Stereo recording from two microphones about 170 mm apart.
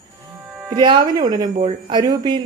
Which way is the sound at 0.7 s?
25° right (ahead or behind).